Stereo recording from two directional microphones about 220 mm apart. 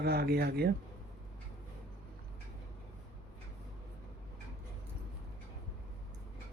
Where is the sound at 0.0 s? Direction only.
45° right (ahead or behind).